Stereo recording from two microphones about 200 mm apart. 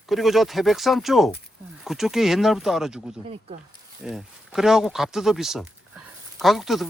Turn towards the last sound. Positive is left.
turn(degrees=0)  # may be behind; listen again after turning